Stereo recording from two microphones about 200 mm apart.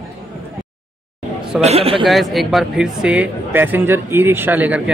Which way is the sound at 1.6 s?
30° right (ahead or behind).